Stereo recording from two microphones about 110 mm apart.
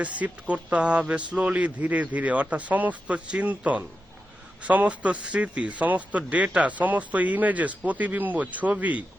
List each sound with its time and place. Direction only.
0.0 s speech: 15° right (ahead or behind)